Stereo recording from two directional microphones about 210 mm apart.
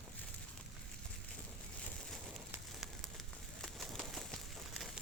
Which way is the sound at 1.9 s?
Centre (ahead or behind).